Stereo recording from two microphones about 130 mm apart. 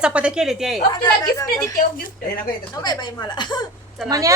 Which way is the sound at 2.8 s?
35° left (ahead or behind).